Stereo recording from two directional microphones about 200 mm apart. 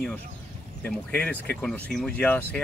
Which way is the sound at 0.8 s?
5° left (ahead or behind).